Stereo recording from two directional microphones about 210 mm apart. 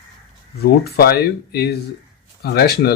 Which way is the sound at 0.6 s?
45° left (ahead or behind).